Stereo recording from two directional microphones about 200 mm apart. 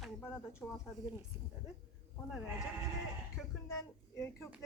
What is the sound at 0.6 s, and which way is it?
Speech, 15° left (ahead or behind).